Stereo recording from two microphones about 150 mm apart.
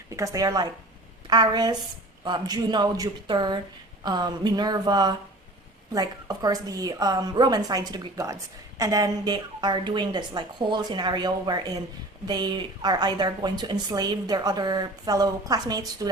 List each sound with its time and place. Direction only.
0.2 s a woman's voice: 20° right (ahead or behind)